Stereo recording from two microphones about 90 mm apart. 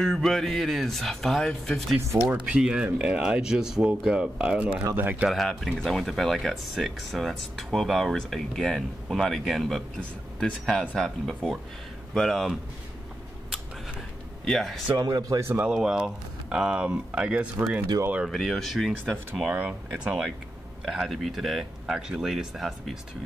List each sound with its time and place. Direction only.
0.0 s speech: 5° left (ahead or behind)
2.1 s speech: 10° right (ahead or behind)
4.9 s speech: 20° right (ahead or behind)
5.3 s speech: centre (ahead or behind)
14.4 s speech: 5° left (ahead or behind)
15.0 s speech: 45° right (ahead or behind)
15.6 s speech: 5° right (ahead or behind)
18.3 s speech: centre (ahead or behind)
19.3 s speech: 10° right (ahead or behind)